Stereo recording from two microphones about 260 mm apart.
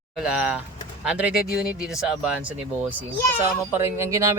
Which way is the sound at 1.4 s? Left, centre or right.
Left.